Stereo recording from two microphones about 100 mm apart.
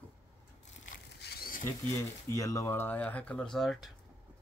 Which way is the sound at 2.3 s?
30° left (ahead or behind).